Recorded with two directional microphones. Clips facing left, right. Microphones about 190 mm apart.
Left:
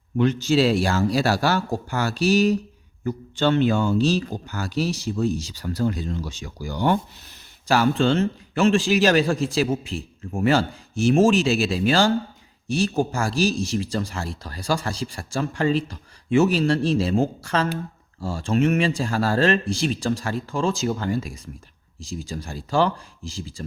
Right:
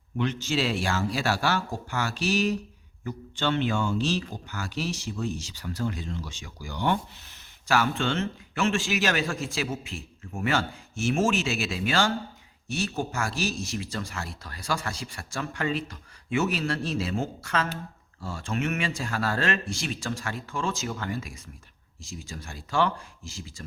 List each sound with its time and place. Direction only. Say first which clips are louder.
0.2 s speech: left 8 dB; 40° left (ahead or behind)